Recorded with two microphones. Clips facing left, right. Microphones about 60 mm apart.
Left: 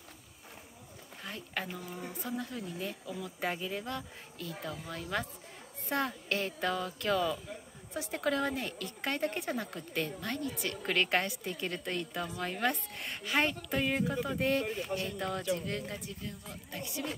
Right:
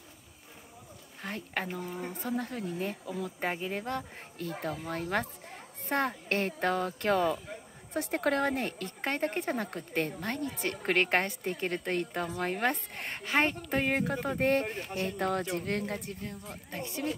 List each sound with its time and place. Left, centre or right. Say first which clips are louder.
1.2 s speech: right 4 dB; right